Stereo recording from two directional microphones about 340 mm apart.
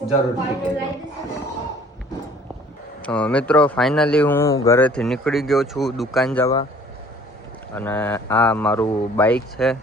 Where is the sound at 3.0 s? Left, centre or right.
Centre.